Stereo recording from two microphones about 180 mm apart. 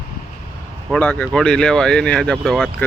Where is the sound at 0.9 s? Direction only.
5° left (ahead or behind).